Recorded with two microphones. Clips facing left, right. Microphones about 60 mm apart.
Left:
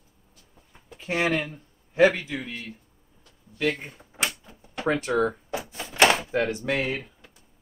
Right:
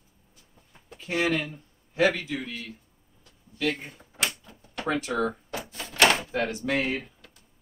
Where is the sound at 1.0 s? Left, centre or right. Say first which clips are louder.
Left 1 dB; left.